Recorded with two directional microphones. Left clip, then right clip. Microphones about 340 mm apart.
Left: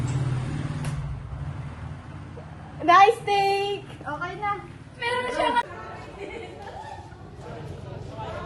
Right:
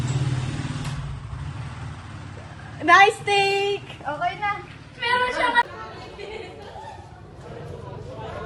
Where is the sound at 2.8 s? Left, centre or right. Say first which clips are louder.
Right 1 dB; right.